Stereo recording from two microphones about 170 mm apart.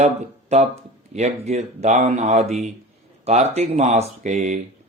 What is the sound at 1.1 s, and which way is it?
Speech, 40° right (ahead or behind).